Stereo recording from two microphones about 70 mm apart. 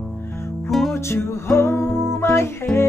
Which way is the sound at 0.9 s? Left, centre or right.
Left.